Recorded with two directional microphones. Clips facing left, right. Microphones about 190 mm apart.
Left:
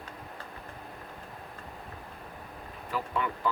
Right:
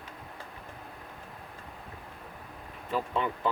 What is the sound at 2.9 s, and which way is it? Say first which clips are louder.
Speech: right 2 dB; 20° right (ahead or behind).